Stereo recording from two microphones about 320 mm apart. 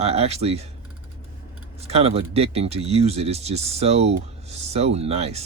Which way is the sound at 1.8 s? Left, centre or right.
Centre.